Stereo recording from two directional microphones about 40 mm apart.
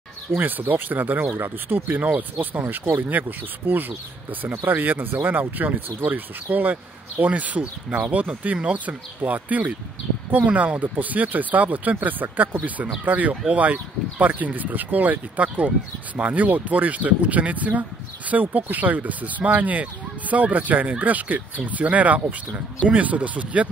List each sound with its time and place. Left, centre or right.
0.4 s speech: right
2.0 s speech: right
2.6 s speech: right
3.0 s speech: right